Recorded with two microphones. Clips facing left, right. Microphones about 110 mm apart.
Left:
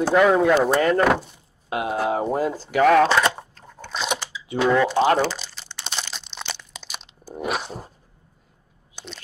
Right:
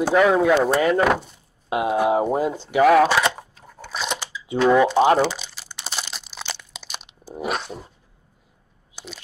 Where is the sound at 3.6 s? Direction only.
5° right (ahead or behind).